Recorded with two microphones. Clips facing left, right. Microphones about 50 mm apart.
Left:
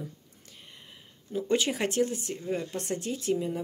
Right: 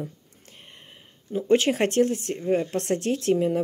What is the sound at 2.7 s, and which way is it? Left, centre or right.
Speech, right.